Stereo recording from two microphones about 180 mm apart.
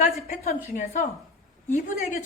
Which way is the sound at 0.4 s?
45° left (ahead or behind).